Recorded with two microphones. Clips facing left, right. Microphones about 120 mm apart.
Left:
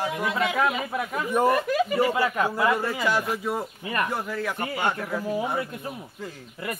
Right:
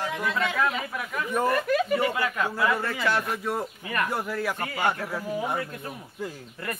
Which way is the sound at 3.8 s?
20° left (ahead or behind).